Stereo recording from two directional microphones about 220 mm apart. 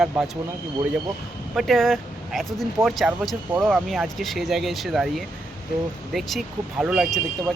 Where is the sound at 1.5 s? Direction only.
Centre (ahead or behind).